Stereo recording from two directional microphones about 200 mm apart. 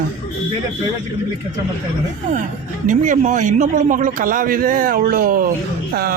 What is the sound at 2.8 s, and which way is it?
A man's voice, 40° right (ahead or behind).